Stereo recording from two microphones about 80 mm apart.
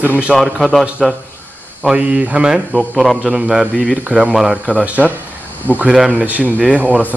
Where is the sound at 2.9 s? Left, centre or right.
Centre.